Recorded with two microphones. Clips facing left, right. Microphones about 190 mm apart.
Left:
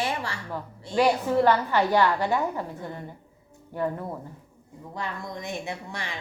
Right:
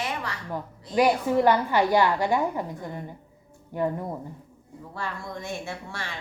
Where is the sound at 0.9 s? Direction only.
10° right (ahead or behind).